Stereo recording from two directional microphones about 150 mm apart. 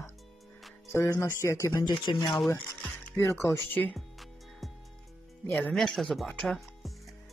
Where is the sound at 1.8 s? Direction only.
30° left (ahead or behind).